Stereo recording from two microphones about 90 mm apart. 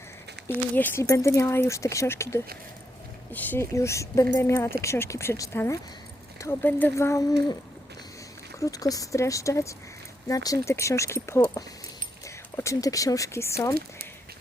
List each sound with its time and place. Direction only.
0.4 s speech: 25° left (ahead or behind)
1.0 s speech: 35° left (ahead or behind)
3.3 s speech: 20° left (ahead or behind)
3.6 s speech: 35° left (ahead or behind)
6.4 s speech: 25° left (ahead or behind)
8.5 s speech: 40° left (ahead or behind)
12.8 s speech: 40° left (ahead or behind)